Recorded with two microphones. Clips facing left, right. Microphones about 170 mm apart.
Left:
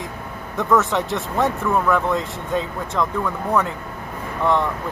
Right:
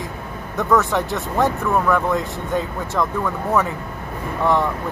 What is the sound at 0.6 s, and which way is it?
Speech, centre (ahead or behind).